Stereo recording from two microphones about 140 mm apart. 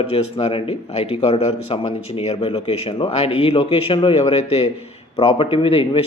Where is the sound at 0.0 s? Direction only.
40° left (ahead or behind).